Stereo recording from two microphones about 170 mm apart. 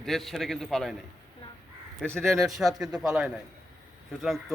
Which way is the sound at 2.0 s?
5° left (ahead or behind).